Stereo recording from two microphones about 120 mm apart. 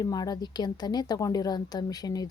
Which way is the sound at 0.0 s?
30° left (ahead or behind).